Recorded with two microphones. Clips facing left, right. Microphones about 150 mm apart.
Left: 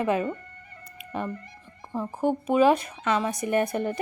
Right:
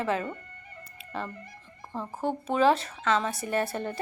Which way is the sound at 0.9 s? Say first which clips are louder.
Left 4 dB; 15° left (ahead or behind).